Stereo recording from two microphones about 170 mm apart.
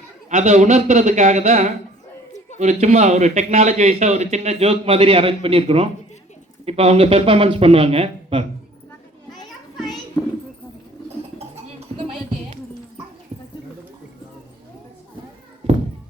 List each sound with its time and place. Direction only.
0.3 s a man's voice: 45° right (ahead or behind)